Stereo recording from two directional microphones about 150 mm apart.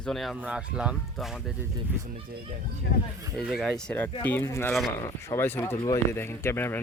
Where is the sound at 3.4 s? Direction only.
Centre (ahead or behind).